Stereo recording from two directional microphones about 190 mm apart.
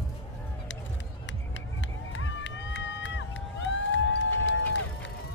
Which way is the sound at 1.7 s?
80° left.